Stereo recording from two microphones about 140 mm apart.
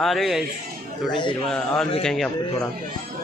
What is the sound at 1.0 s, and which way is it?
Speech, 35° left (ahead or behind).